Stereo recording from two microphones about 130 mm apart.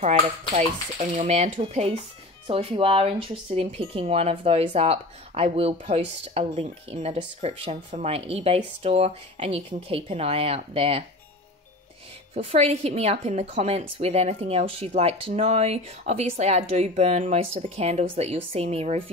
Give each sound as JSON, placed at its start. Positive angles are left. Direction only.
{"t": 0.6, "sound": "speech", "side_deg": -65}
{"t": 12.4, "sound": "speech", "side_deg": -50}